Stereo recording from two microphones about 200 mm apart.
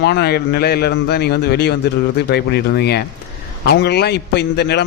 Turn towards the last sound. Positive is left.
turn(degrees=55)  # may be behind; listen again after turning